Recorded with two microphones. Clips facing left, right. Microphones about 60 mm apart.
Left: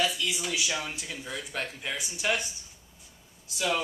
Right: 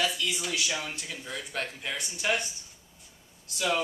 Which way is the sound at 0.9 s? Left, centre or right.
Centre.